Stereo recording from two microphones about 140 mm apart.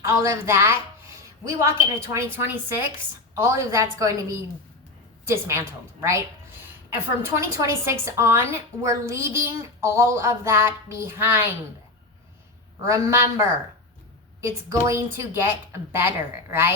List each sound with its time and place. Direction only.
0.0 s a woman's voice: 20° right (ahead or behind)
7.3 s a woman's voice: 20° right (ahead or behind)
12.9 s a woman's voice: 20° right (ahead or behind)